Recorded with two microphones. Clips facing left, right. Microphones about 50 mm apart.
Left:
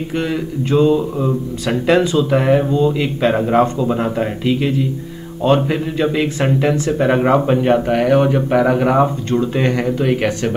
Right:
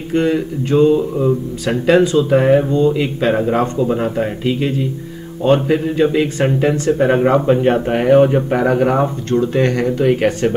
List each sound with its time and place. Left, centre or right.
0.1 s speech: centre
7.2 s speech: centre
7.5 s speech: centre
8.5 s speech: centre